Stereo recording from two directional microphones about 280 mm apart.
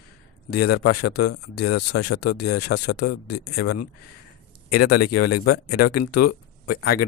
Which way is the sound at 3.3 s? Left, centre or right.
Left.